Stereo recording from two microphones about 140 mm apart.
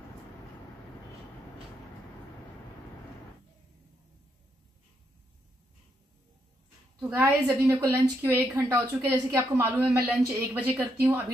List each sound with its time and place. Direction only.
7.0 s a woman's voice: 20° right (ahead or behind)
9.8 s speech: centre (ahead or behind)
10.5 s a woman's voice: 10° right (ahead or behind)